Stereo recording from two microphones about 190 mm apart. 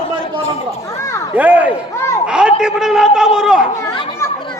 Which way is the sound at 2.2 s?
5° right (ahead or behind).